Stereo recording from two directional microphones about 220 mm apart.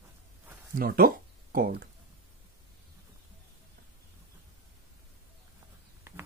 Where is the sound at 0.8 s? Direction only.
40° right (ahead or behind).